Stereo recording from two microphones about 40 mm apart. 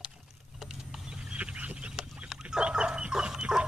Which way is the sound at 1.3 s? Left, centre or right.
Right.